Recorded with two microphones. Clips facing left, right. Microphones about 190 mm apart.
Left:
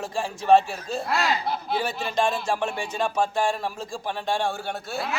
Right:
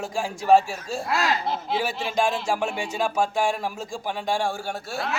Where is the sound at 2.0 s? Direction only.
15° right (ahead or behind).